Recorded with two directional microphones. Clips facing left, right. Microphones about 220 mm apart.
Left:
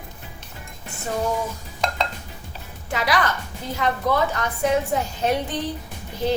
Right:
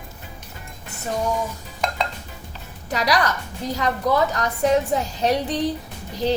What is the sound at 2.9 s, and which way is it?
A woman's voice, 40° right (ahead or behind).